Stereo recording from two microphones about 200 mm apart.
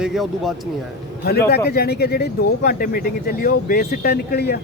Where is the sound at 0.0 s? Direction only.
Centre (ahead or behind).